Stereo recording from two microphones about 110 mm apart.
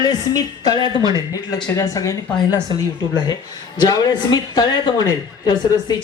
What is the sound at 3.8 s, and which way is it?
Speech, 40° left (ahead or behind).